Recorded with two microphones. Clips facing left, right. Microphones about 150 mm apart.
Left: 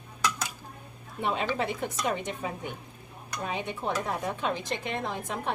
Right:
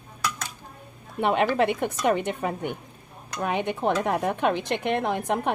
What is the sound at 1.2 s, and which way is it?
Speech, 65° right (ahead or behind).